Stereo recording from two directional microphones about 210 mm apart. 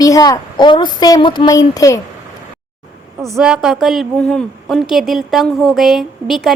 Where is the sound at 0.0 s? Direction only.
15° left (ahead or behind).